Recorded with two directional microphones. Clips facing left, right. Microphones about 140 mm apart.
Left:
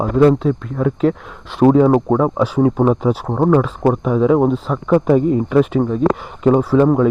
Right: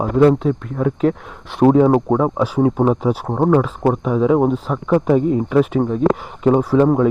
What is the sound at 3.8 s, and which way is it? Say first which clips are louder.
Speech: left 3 dB; 5° right (ahead or behind).